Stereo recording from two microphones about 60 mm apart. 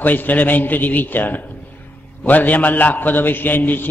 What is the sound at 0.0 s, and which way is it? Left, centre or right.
A man's voice, left.